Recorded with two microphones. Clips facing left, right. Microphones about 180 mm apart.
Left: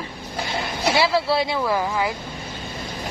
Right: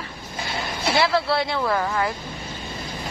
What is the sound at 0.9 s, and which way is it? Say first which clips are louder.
Speech: left 1 dB; 15° left (ahead or behind).